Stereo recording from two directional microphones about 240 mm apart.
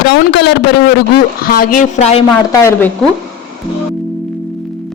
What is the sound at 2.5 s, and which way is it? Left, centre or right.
Speech, centre.